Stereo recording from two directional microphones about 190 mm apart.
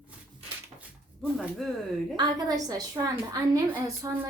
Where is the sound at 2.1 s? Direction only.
20° right (ahead or behind).